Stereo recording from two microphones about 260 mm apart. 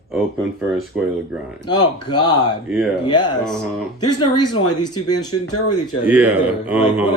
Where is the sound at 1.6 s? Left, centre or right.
Centre.